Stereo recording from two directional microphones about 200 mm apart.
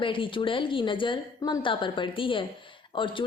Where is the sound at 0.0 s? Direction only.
25° left (ahead or behind).